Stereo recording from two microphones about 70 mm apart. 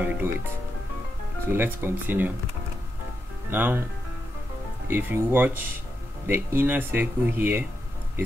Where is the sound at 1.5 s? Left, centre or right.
Right.